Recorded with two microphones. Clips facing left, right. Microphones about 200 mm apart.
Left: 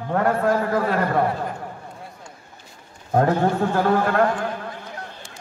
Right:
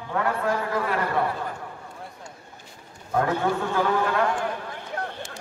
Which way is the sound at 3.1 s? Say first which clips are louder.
Left 5 dB; 40° left (ahead or behind).